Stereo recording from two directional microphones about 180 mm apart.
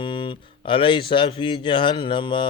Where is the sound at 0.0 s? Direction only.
25° left (ahead or behind).